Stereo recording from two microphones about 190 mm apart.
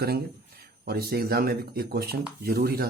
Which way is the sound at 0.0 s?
55° right (ahead or behind).